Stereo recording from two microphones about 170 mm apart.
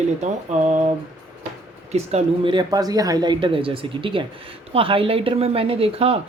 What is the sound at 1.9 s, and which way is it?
Speech, 40° right (ahead or behind).